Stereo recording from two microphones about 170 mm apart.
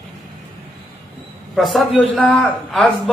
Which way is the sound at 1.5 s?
Centre (ahead or behind).